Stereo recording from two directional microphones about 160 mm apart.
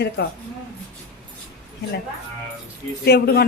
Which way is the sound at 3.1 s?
85° left.